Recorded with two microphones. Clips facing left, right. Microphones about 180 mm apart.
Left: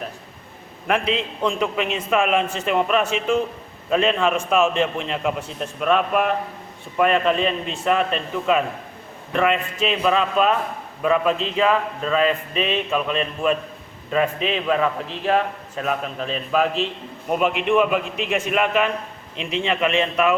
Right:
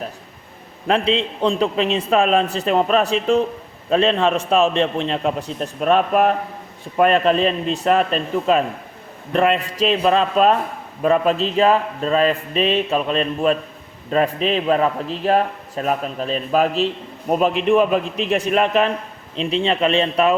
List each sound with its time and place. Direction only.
0.9 s a man's voice: 30° right (ahead or behind)